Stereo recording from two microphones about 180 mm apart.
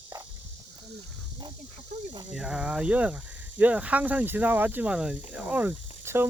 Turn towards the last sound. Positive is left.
turn(degrees=-10)  # may be behind; listen again after turning